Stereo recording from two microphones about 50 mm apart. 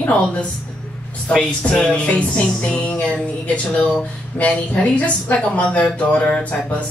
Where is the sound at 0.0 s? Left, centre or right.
Left.